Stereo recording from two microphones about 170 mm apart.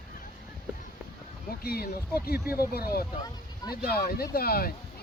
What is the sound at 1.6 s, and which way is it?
Speech, 65° left (ahead or behind).